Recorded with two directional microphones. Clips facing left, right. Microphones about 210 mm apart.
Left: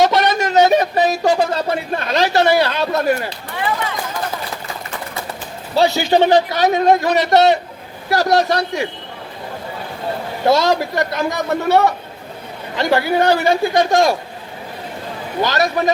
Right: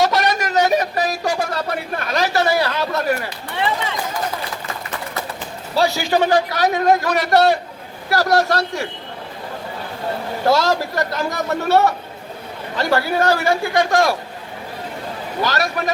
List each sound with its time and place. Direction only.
0.0 s a sound: 20° left (ahead or behind)
5.7 s a man's voice: 25° left (ahead or behind)
10.5 s a man's voice: 20° left (ahead or behind)
15.4 s a man's voice: 20° left (ahead or behind)